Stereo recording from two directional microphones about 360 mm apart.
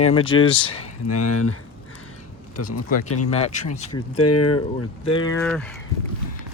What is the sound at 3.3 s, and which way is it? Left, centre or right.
Speech, centre.